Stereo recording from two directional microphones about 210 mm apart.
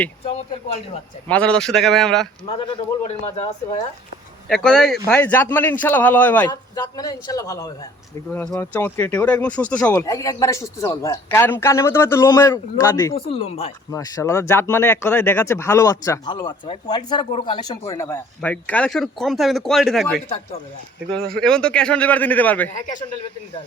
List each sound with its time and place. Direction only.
1.3 s speech: 5° left (ahead or behind)
2.5 s a man's voice: 25° left (ahead or behind)
4.4 s speech: 5° left (ahead or behind)
6.5 s speech: 20° left (ahead or behind)
13.1 s a man's voice: 30° left (ahead or behind)
13.9 s speech: 15° left (ahead or behind)